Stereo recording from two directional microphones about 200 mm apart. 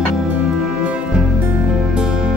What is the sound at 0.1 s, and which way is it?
Music, 5° right (ahead or behind).